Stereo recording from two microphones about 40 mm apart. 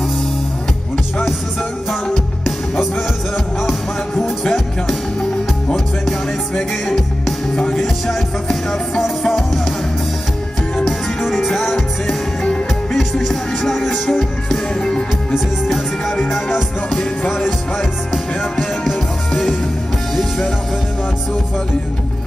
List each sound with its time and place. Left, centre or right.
4.1 s music: centre
7.5 s music: left
10.9 s music: centre
12.9 s music: centre; by 15.0 s left
16.1 s music: centre
18.4 s music: centre